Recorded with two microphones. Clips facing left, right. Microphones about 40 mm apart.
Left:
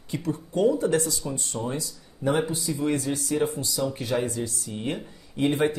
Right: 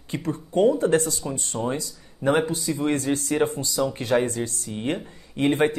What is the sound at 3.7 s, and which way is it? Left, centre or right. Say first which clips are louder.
Speech: right 4 dB; right.